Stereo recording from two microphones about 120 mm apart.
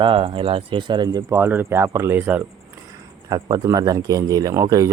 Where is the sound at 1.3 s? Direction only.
20° right (ahead or behind).